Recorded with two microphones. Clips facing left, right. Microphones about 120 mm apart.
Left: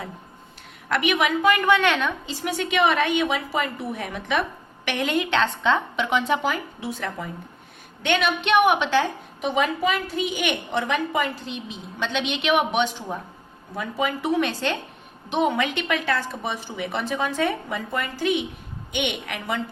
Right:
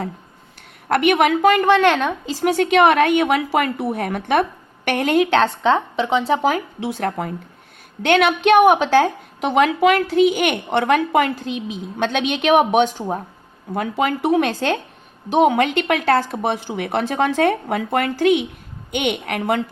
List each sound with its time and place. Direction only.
0.9 s a woman's voice: 50° right (ahead or behind)
2.4 s a woman's voice: 55° right (ahead or behind); by 6.5 s 35° right (ahead or behind)
6.7 s speech: 65° right (ahead or behind)
8.4 s a woman's voice: 45° right (ahead or behind)
9.4 s speech: 70° right (ahead or behind)
11.9 s a woman's voice: 50° right (ahead or behind)
13.7 s speech: 60° right (ahead or behind); by 14.8 s 45° right (ahead or behind)
15.4 s speech: 55° right (ahead or behind)
18.9 s a woman's voice: 45° right (ahead or behind)